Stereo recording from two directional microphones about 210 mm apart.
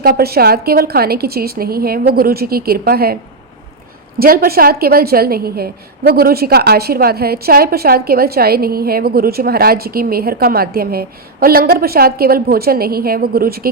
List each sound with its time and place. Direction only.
0.0 s a woman's voice: 45° right (ahead or behind)
4.2 s a woman's voice: 45° right (ahead or behind)